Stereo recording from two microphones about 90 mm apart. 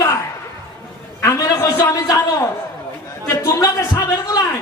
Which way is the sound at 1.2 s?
40° left (ahead or behind).